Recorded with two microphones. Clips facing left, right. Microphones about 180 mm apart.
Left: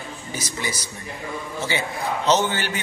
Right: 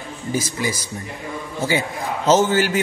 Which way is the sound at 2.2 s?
45° right (ahead or behind).